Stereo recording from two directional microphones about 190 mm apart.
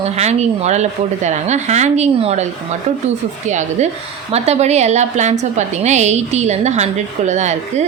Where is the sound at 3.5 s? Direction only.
40° right (ahead or behind).